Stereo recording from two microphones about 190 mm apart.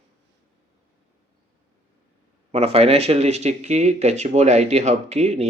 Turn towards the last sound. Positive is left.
turn(degrees=-35)  # may be behind; listen again after turning